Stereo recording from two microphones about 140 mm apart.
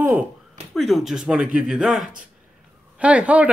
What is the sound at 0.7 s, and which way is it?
Speech, centre (ahead or behind).